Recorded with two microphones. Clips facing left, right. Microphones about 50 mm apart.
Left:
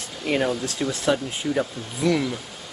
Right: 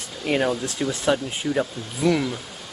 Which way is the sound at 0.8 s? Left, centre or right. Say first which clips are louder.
Right 1 dB; centre.